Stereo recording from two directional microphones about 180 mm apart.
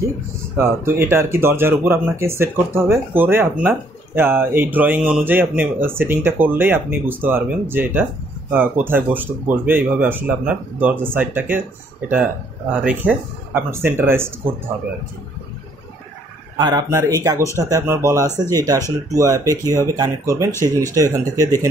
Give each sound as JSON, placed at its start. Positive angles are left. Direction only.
{"t": 0.6, "sound": "speech", "side_deg": -15}
{"t": 12.8, "sound": "speech", "side_deg": -10}
{"t": 16.5, "sound": "speech", "side_deg": -20}
{"t": 17.4, "sound": "speech", "side_deg": 15}
{"t": 17.6, "sound": "speech", "side_deg": -15}